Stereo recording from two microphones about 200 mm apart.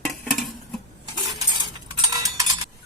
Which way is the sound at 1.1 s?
20° right (ahead or behind).